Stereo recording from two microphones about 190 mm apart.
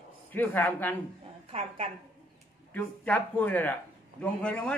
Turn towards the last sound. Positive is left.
turn(degrees=5)  # may be behind; listen again after turning